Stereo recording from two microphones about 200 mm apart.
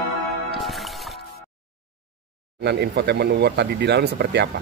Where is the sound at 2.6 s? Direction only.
55° right (ahead or behind).